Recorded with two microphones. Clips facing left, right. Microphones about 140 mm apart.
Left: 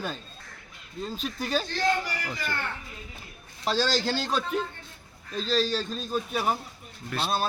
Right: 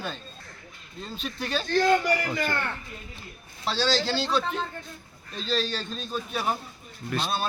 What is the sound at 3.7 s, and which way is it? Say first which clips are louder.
Speech: even; 45° left (ahead or behind).